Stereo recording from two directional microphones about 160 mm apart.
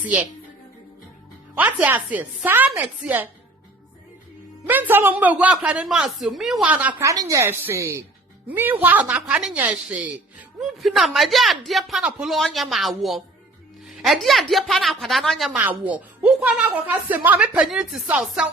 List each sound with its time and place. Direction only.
0.0 s speech: 10° right (ahead or behind)
1.5 s speech: 10° right (ahead or behind)
4.7 s speech: 10° right (ahead or behind)
7.1 s a woman's voice: 20° right (ahead or behind)